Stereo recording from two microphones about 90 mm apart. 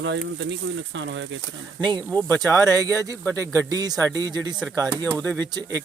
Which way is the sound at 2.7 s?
40° right (ahead or behind).